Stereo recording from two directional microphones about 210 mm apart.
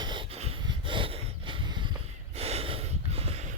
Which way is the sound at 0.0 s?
20° right (ahead or behind).